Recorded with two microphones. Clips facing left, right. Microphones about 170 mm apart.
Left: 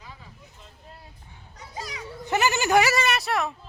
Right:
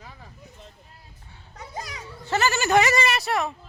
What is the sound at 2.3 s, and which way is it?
Speech, 15° left (ahead or behind).